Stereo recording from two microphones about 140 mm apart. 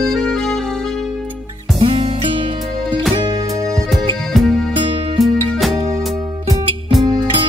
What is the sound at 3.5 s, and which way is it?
Music, centre (ahead or behind).